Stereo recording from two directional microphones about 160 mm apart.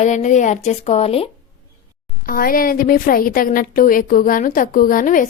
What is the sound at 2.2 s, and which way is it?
A woman's voice, 65° left (ahead or behind).